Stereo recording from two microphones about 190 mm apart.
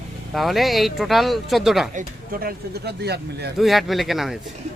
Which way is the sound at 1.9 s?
50° right (ahead or behind).